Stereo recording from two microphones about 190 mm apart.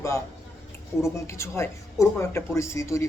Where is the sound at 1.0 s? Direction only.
15° left (ahead or behind).